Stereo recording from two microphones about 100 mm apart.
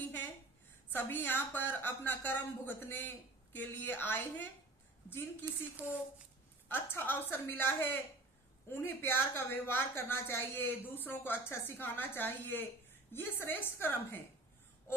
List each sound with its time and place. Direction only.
0.9 s speech: 20° left (ahead or behind)
6.7 s speech: 25° left (ahead or behind)